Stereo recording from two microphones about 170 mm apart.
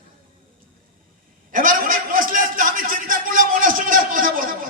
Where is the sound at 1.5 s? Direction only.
55° right (ahead or behind).